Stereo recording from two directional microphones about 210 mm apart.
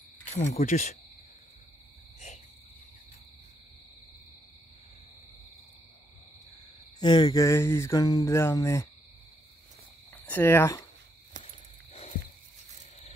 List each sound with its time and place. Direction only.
0.5 s speech: 35° left (ahead or behind)
2.1 s cricket: 35° left (ahead or behind)
7.0 s a sound: 20° left (ahead or behind)
10.1 s speech: 10° left (ahead or behind)